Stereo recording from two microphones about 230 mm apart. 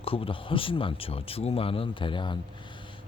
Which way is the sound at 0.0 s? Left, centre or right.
Left.